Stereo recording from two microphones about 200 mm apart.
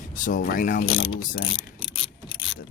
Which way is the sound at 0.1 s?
40° left (ahead or behind).